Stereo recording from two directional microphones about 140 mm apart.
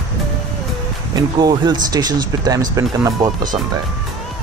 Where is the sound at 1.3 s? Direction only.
30° right (ahead or behind).